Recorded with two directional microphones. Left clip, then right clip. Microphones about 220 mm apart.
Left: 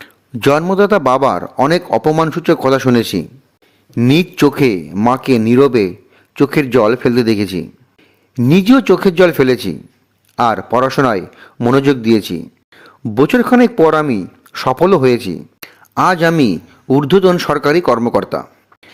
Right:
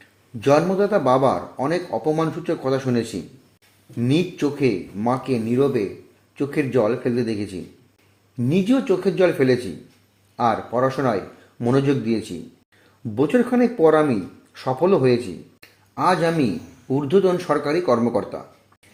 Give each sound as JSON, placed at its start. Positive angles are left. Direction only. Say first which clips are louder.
{"t": 0.0, "sound": "a man's voice", "louder": "left 9 dB", "side_deg": 45}
{"t": 15.6, "sound": "a sound", "louder": "left 7 dB", "side_deg": 45}
{"t": 16.9, "sound": "a man's voice", "louder": "left 8 dB", "side_deg": 50}